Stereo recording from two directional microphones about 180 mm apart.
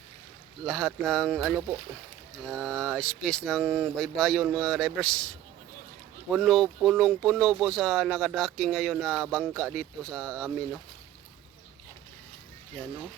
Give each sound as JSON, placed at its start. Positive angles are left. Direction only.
{"t": 0.6, "sound": "speech", "side_deg": 0}